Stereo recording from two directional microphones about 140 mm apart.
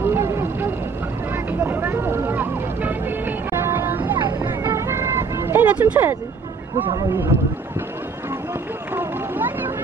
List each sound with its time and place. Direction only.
0.0 s vehicle: 20° right (ahead or behind)
4.5 s music: 20° right (ahead or behind)
8.9 s a sound: 15° right (ahead or behind)